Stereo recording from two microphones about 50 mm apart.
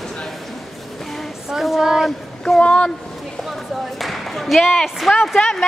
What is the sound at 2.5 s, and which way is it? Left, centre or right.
Speech, left.